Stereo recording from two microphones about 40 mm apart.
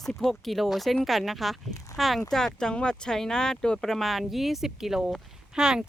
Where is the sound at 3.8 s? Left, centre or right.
Centre.